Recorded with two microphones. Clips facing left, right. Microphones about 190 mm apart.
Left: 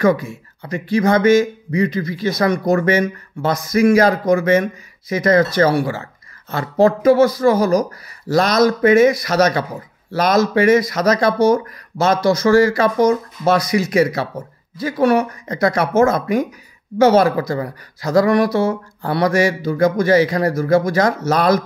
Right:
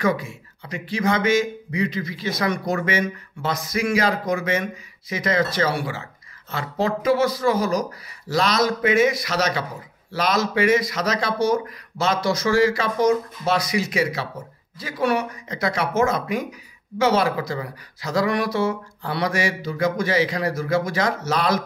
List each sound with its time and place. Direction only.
0.0 s speech: 45° left (ahead or behind)